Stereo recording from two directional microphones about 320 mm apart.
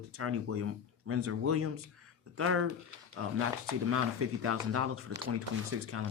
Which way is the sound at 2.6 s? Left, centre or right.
Right.